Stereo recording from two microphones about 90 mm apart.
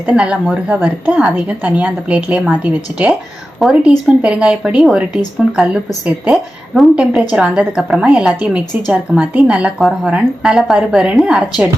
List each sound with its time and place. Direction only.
0.0 s a woman's voice: 10° right (ahead or behind)